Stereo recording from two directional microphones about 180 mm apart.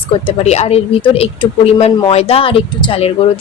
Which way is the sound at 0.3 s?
35° left (ahead or behind).